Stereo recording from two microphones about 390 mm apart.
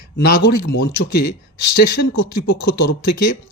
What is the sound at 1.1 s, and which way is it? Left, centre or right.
Speech, left.